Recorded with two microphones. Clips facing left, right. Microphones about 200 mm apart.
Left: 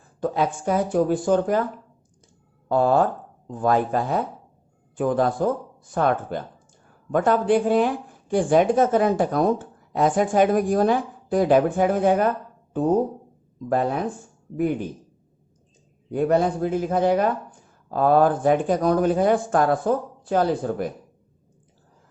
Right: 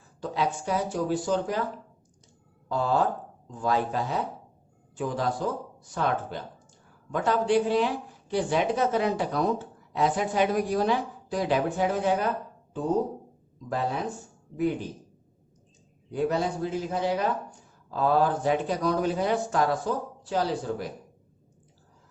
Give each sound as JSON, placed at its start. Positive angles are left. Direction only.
{"t": 0.2, "sound": "speech", "side_deg": 50}
{"t": 2.6, "sound": "speech", "side_deg": 55}
{"t": 13.7, "sound": "speech", "side_deg": 55}
{"t": 16.1, "sound": "speech", "side_deg": 55}